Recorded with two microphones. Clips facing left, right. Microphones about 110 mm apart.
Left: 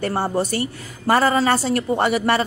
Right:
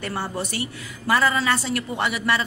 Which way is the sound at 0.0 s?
35° left (ahead or behind).